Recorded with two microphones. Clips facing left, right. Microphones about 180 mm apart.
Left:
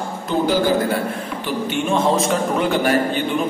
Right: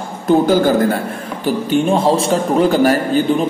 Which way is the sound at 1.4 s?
35° right (ahead or behind).